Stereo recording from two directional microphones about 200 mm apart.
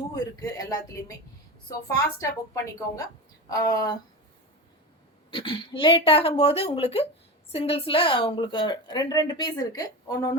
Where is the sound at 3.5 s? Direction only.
20° left (ahead or behind).